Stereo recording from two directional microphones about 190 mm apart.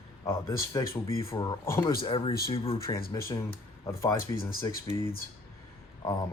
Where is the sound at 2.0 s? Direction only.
25° left (ahead or behind).